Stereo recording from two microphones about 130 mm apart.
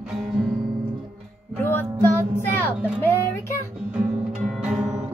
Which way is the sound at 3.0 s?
20° left (ahead or behind).